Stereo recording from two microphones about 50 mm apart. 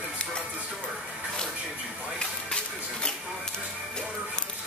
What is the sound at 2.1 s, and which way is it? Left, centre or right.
Music, centre.